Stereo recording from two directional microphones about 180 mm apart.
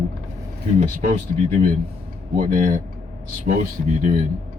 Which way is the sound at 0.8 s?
40° right (ahead or behind).